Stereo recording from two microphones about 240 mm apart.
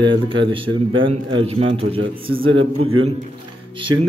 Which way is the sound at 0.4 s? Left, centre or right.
Right.